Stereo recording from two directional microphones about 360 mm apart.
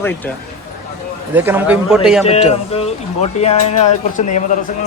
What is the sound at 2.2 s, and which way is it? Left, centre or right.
Speech, centre.